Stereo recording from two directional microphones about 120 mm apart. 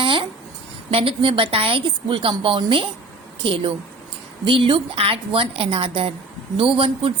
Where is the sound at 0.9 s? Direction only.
50° right (ahead or behind).